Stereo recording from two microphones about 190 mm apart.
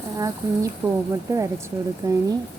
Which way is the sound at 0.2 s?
15° right (ahead or behind).